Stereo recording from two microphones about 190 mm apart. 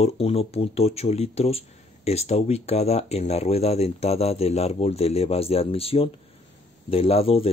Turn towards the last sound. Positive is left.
turn(degrees=30)  # may be behind; listen again after turning